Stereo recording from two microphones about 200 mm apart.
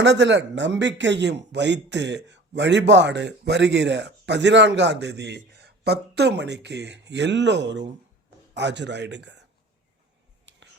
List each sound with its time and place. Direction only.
0.0 s speech: 60° right (ahead or behind)